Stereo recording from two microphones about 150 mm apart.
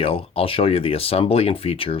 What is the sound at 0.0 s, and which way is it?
Speech, 40° left (ahead or behind).